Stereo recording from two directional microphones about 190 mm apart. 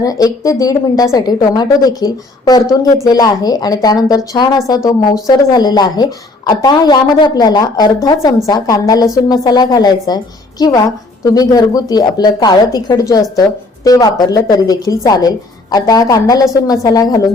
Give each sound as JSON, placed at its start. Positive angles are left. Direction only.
{"t": 0.0, "sound": "speech", "side_deg": 20}